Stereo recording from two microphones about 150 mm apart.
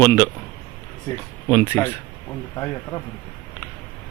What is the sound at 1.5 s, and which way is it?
Speech, 15° left (ahead or behind).